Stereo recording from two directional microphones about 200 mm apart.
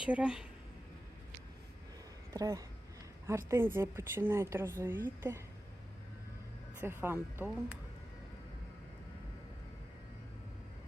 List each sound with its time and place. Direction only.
0.0 s speech: 5° right (ahead or behind)
2.3 s a woman's voice: 15° right (ahead or behind)
6.7 s a woman's voice: 10° right (ahead or behind)